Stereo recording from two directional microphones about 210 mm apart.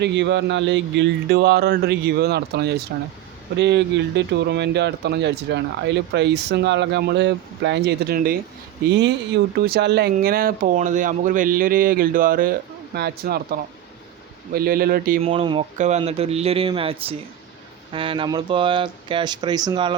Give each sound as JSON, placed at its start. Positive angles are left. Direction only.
{"t": 0.0, "sound": "speech", "side_deg": -55}
{"t": 8.9, "sound": "speech", "side_deg": -55}
{"t": 15.2, "sound": "speech", "side_deg": -25}